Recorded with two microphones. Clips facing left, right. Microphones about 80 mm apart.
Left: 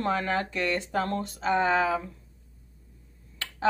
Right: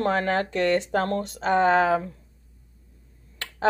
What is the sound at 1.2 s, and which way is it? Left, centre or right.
Speech, right.